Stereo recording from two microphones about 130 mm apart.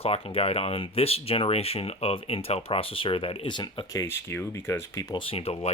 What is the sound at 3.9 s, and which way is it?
Speech, 20° left (ahead or behind).